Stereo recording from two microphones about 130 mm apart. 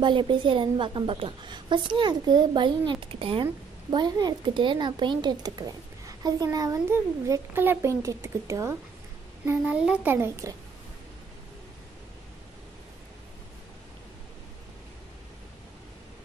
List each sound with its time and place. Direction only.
0.0 s a woman's voice: 40° right (ahead or behind)
3.9 s speech: 30° right (ahead or behind)
9.5 s a child's voice: 10° right (ahead or behind)